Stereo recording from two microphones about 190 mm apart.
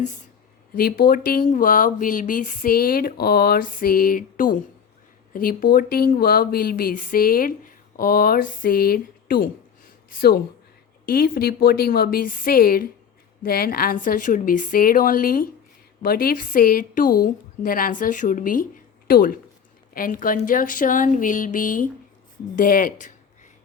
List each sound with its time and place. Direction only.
0.8 s speech: 50° left (ahead or behind)